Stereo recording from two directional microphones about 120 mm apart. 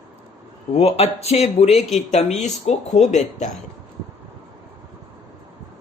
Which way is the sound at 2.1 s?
70° left (ahead or behind).